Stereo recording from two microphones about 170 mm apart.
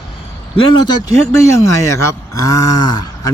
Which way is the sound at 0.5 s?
30° left (ahead or behind).